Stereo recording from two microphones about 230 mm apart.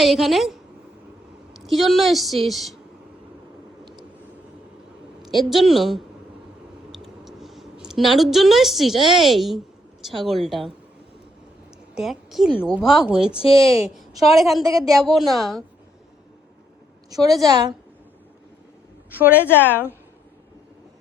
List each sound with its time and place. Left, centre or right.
0.0 s a woman's voice: centre
5.2 s a woman's voice: centre
11.9 s a woman's voice: centre
13.4 s a woman's voice: left
14.3 s a woman's voice: centre
17.1 s a woman's voice: centre
19.1 s a woman's voice: centre
19.5 s a woman's voice: centre